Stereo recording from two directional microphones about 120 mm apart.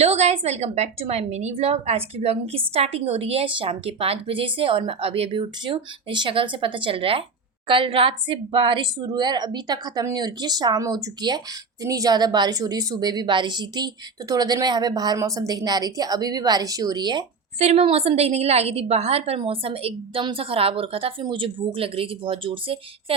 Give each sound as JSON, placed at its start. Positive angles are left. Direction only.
{"t": 0.0, "sound": "a woman's voice", "side_deg": -65}
{"t": 17.6, "sound": "a woman's voice", "side_deg": -60}